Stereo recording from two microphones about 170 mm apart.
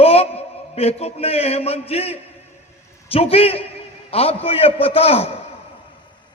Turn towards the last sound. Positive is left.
turn(degrees=35)  # may be behind; listen again after turning